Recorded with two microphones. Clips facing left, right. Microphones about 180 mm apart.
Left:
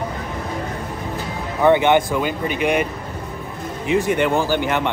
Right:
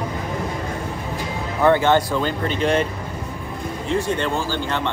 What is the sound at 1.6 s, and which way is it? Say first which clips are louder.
Speech: left 2 dB; 15° left (ahead or behind).